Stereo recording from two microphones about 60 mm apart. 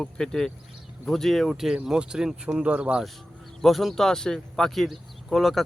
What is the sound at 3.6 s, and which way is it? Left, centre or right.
Speech, centre.